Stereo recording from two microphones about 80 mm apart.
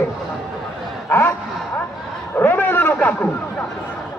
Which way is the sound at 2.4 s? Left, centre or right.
Left.